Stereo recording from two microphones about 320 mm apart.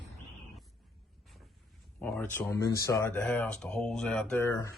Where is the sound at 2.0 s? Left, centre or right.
Centre.